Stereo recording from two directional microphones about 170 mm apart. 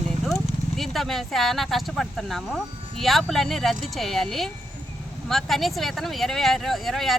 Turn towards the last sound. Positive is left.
turn(degrees=0)  # may be behind; listen again after turning